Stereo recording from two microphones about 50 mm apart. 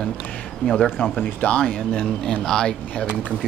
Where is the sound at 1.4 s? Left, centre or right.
Left.